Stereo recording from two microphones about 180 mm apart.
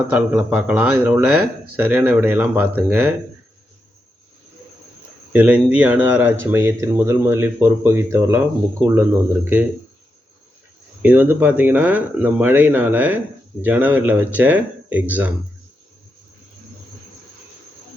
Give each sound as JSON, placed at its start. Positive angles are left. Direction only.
{"t": 0.1, "sound": "speech", "side_deg": -10}
{"t": 5.3, "sound": "speech", "side_deg": -10}
{"t": 11.0, "sound": "speech", "side_deg": -10}